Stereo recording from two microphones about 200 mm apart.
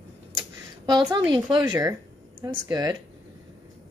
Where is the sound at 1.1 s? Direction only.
20° right (ahead or behind).